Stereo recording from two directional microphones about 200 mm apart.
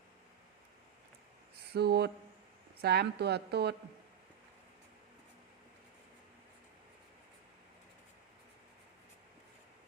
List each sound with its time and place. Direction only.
1.7 s a woman's voice: 55° right (ahead or behind)